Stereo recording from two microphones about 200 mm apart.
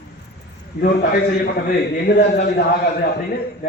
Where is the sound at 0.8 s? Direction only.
50° left (ahead or behind).